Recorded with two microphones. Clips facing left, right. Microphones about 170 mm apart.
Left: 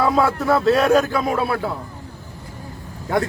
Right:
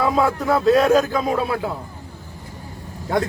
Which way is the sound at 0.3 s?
15° right (ahead or behind).